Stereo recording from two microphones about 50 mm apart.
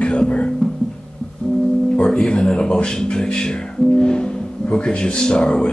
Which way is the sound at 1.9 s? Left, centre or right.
Centre.